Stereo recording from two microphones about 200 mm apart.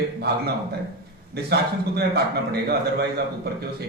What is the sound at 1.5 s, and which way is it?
A man's voice, 55° right (ahead or behind).